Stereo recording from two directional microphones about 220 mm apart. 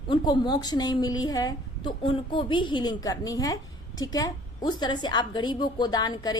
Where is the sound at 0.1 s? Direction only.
20° left (ahead or behind).